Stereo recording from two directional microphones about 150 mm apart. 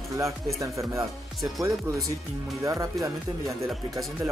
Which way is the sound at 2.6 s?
20° right (ahead or behind).